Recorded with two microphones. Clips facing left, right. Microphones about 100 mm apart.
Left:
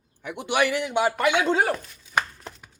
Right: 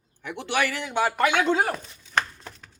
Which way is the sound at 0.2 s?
15° left (ahead or behind).